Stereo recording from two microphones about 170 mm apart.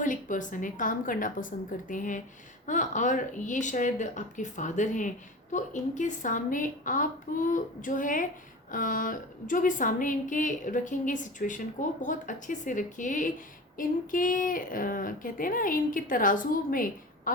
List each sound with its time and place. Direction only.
0.0 s a woman's voice: 50° left (ahead or behind)